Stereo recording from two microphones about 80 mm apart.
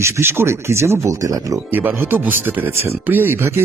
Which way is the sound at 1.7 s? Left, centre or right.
Right.